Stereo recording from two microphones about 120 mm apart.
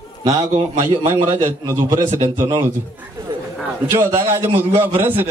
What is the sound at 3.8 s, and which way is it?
A man's voice, 20° right (ahead or behind).